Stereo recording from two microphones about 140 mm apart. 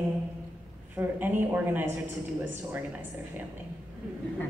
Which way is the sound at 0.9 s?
15° right (ahead or behind).